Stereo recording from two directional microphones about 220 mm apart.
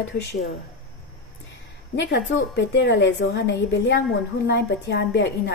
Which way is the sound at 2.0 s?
55° left (ahead or behind).